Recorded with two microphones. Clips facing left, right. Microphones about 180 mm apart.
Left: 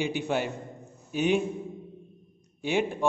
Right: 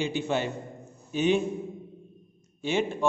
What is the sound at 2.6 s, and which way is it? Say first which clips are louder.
Speech: even; 15° left (ahead or behind).